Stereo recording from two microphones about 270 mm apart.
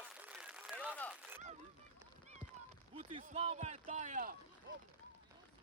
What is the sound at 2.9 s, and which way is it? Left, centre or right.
Speech, right.